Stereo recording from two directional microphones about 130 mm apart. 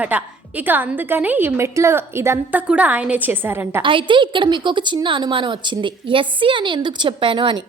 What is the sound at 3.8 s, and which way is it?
A woman's voice, 40° right (ahead or behind).